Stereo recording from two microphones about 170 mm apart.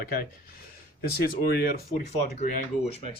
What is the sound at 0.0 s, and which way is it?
Speech, 60° left (ahead or behind).